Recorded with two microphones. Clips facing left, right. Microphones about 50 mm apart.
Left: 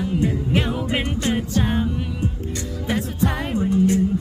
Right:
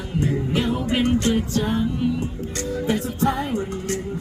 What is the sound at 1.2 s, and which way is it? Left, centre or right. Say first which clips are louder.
Music: even; left.